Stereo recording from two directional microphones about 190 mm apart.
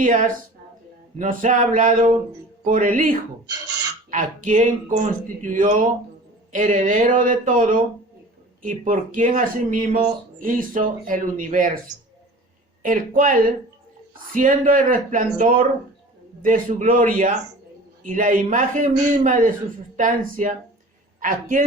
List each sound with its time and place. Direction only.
0.0 s speech: 45° right (ahead or behind)
12.8 s a man's voice: 45° right (ahead or behind)